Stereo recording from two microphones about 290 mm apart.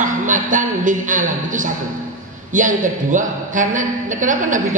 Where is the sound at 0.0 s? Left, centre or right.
Right.